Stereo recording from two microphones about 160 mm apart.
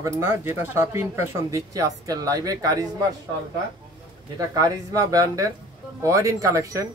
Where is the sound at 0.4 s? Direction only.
15° right (ahead or behind).